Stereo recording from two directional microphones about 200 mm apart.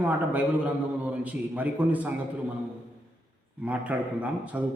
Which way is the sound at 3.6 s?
5° right (ahead or behind).